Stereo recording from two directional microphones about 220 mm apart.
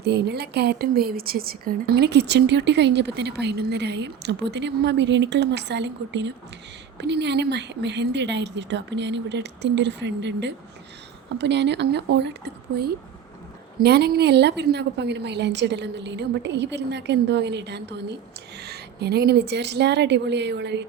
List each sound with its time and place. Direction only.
0.0 s a woman's voice: 50° right (ahead or behind)